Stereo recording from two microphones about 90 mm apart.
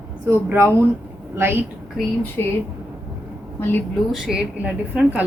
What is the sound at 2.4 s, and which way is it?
Speech, 30° left (ahead or behind).